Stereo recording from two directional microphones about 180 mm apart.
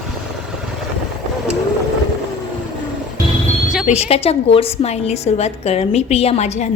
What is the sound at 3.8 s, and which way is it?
A woman's voice, 35° left (ahead or behind).